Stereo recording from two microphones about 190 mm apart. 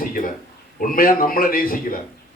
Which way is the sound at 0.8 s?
45° left (ahead or behind).